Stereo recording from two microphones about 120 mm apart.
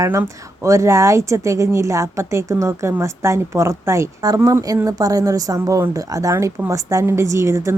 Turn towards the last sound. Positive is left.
turn(degrees=-25)  # may be behind; listen again after turning